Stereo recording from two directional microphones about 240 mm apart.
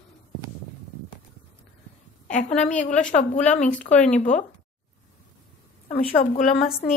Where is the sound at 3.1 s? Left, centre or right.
Left.